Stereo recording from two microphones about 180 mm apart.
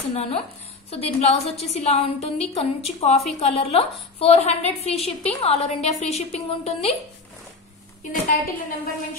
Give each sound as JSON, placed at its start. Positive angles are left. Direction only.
{"t": 0.1, "sound": "a woman's voice", "side_deg": 35}
{"t": 8.1, "sound": "a woman's voice", "side_deg": 50}